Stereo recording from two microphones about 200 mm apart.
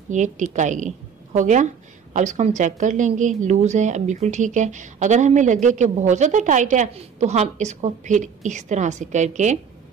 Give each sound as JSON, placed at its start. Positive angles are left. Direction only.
{"t": 0.1, "sound": "a woman's voice", "side_deg": -35}